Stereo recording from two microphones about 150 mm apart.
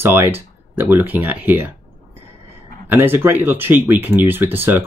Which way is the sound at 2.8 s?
15° right (ahead or behind).